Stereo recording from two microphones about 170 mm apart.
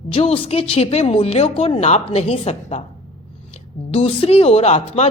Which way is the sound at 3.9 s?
35° left (ahead or behind).